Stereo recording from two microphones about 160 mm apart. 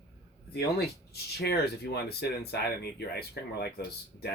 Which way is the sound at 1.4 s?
85° left.